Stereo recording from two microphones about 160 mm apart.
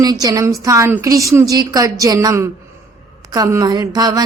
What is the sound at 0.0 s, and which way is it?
Speech, 25° right (ahead or behind).